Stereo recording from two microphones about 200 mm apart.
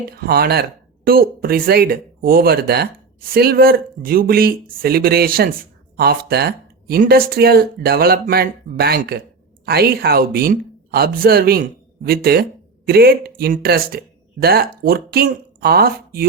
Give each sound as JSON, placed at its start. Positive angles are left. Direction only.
{"t": 0.2, "sound": "speech", "side_deg": -50}